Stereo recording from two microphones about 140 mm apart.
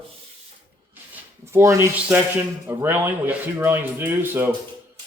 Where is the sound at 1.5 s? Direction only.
20° right (ahead or behind).